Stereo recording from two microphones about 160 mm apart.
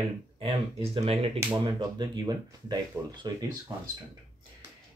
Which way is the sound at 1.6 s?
25° right (ahead or behind).